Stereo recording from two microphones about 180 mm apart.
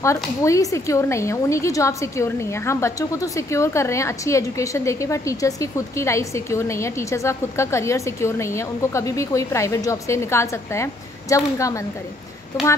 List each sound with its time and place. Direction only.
0.0 s a woman's voice: 15° left (ahead or behind)